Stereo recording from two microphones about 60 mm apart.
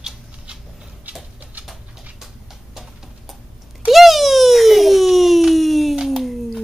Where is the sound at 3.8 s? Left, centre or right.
Centre.